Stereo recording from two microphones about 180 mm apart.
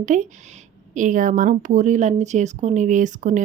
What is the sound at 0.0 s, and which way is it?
A woman's voice, 45° right (ahead or behind).